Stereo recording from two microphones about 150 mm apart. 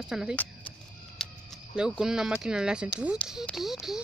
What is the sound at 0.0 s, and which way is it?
Speech, 5° right (ahead or behind).